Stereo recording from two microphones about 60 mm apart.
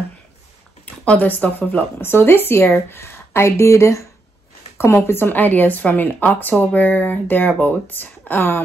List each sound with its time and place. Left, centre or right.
1.1 s speech: left
2.0 s a woman's voice: left